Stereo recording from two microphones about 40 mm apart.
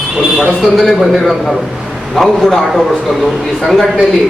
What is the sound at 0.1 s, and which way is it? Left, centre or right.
A man's voice, centre.